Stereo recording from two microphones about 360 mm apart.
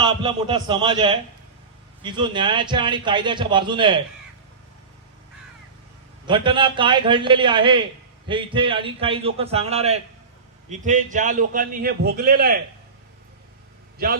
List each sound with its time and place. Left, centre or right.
0.0 s a man's voice: centre
6.2 s a man's voice: centre